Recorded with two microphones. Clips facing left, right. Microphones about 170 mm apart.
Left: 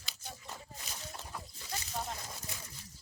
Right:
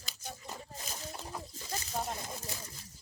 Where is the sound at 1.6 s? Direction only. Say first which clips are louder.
Right 2 dB; 40° right (ahead or behind).